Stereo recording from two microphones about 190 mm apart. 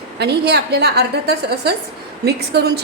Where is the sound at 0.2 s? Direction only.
60° right (ahead or behind).